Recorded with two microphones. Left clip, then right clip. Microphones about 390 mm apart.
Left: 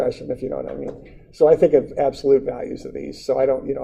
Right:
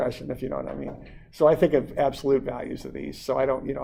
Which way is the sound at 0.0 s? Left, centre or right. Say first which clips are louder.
Left 5 dB; right.